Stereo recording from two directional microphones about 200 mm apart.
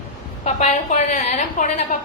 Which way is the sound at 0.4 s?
35° left (ahead or behind).